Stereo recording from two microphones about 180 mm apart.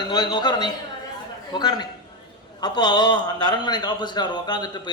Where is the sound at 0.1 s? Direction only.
25° left (ahead or behind).